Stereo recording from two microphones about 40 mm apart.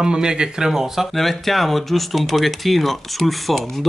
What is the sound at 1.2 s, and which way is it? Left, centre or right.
Speech, centre.